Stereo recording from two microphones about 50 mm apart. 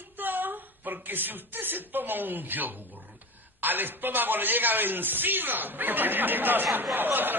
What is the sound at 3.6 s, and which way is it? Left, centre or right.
A man's voice, right.